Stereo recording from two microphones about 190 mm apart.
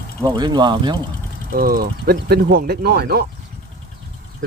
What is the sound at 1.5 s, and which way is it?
Speech, 50° right (ahead or behind).